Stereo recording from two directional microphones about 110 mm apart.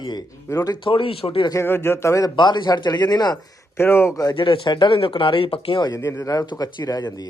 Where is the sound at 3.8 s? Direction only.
20° left (ahead or behind).